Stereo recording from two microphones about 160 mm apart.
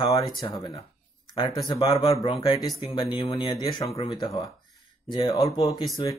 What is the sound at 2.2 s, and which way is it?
Speech, 35° left (ahead or behind).